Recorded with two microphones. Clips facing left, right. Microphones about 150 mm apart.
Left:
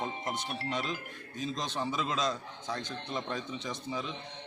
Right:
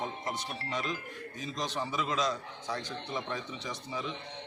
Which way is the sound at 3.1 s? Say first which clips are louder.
Left 2 dB; 20° left (ahead or behind).